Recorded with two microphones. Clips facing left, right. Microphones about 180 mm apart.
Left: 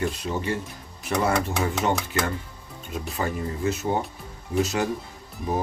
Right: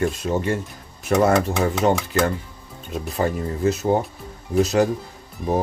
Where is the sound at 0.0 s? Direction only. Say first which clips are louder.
Right 5 dB; 45° right (ahead or behind).